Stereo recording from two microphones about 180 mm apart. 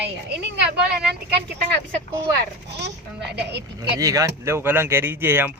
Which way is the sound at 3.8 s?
20° right (ahead or behind).